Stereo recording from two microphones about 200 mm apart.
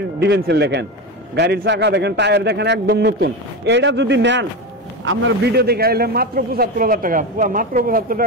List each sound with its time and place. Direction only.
0.2 s a man's voice: 55° right (ahead or behind)
5.0 s a man's voice: 80° right; by 8.3 s 45° right (ahead or behind)